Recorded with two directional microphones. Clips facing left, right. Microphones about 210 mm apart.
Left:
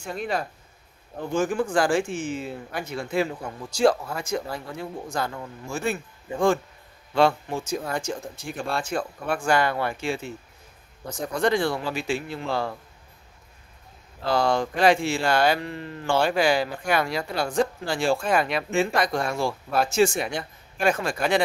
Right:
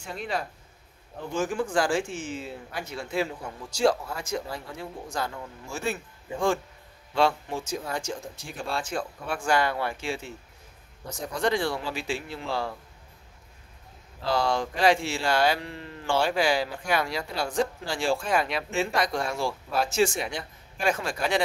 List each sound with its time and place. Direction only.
0.0 s speech: 50° left (ahead or behind)
14.2 s speech: 55° left (ahead or behind)